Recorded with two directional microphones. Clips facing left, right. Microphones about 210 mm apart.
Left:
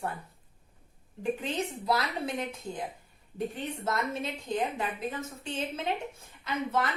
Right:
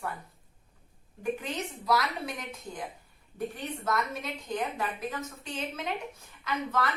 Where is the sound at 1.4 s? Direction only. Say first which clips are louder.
Left 2 dB; 25° left (ahead or behind).